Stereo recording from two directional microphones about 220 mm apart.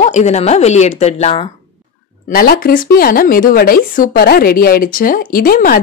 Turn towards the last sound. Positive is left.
turn(degrees=40)  # may be behind; listen again after turning